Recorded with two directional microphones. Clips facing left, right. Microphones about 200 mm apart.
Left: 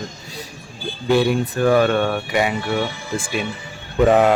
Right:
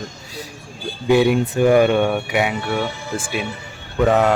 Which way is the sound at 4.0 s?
10° left (ahead or behind).